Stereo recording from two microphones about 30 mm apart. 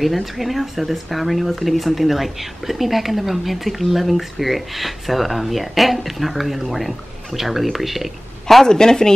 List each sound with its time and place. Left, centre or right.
0.0 s speech: centre
8.6 s speech: left